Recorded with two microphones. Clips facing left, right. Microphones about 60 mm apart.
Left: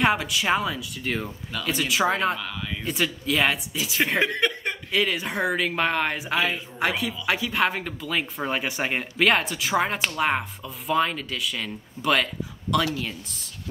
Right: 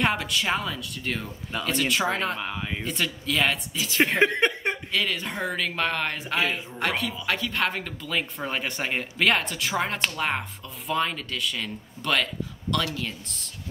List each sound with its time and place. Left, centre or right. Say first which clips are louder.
0.0 s speech: left 3 dB; centre
2.4 s speech: right 1 dB; right
2.8 s speech: left 6 dB; centre
4.2 s a sound: right 2 dB; right
4.9 s speech: left 7 dB; centre